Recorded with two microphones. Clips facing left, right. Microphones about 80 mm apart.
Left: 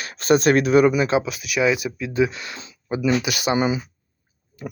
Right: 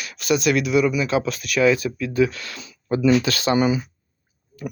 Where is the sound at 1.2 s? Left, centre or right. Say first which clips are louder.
Right 2 dB; centre; by 2.7 s left.